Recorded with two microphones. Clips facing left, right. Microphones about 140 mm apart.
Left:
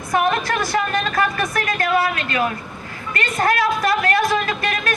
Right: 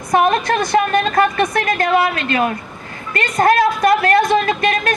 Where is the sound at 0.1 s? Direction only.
25° right (ahead or behind).